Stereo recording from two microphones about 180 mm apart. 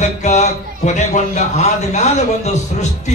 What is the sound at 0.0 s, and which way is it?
A man's voice, 40° left (ahead or behind).